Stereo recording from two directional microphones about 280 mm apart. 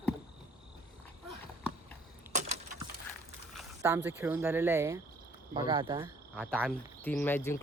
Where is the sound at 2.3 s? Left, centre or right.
Right.